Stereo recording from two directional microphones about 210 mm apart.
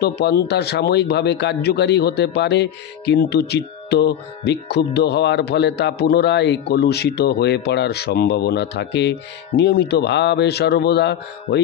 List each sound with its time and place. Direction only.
0.0 s a man's voice: 50° left (ahead or behind)